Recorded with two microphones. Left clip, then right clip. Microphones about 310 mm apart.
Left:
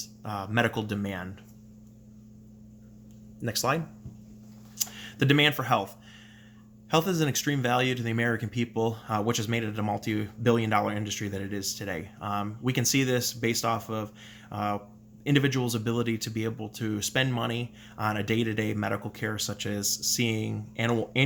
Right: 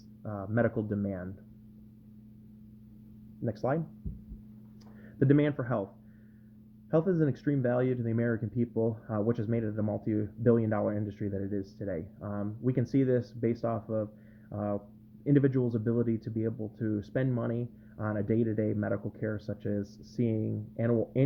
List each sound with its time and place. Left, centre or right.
0.0 s speech: centre
3.4 s speech: centre
4.8 s a sound: centre
6.9 s speech: centre